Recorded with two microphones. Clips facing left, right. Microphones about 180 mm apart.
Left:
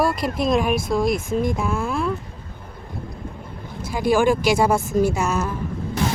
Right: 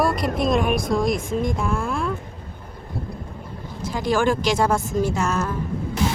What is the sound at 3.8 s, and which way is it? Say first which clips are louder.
Speech: left 3 dB; 10° left (ahead or behind).